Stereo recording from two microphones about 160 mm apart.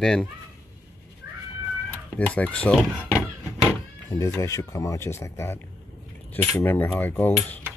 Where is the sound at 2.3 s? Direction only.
5° left (ahead or behind).